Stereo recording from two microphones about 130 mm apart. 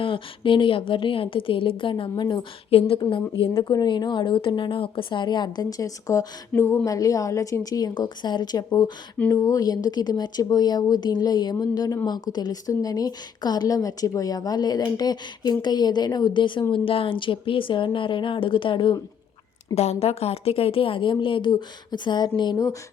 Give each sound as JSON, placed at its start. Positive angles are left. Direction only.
{"t": 0.0, "sound": "speech", "side_deg": 40}
{"t": 3.5, "sound": "a woman's voice", "side_deg": 30}
{"t": 19.7, "sound": "a woman's voice", "side_deg": 55}